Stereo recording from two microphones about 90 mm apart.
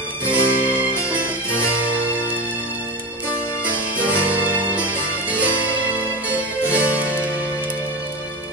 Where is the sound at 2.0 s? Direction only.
15° right (ahead or behind).